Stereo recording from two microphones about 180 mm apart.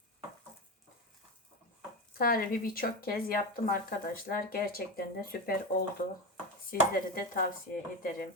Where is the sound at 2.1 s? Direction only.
55° left (ahead or behind).